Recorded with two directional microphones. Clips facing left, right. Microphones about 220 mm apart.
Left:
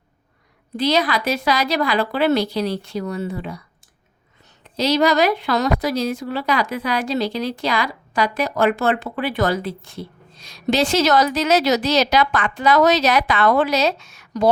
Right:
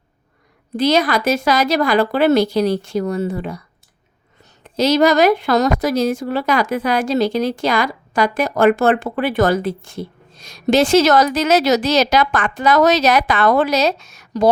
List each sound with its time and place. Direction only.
0.8 s speech: 45° right (ahead or behind)
4.6 s speech: 45° right (ahead or behind)